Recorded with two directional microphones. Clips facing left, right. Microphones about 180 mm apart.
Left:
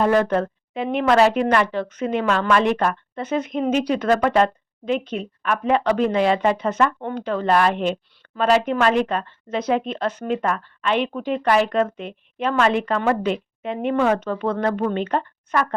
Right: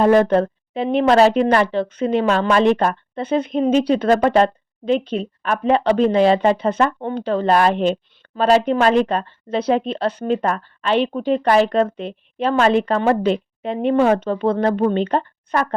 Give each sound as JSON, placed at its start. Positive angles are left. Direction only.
{"t": 0.0, "sound": "speech", "side_deg": -30}